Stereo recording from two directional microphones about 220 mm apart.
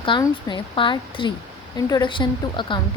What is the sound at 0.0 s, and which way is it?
Speech, 20° left (ahead or behind).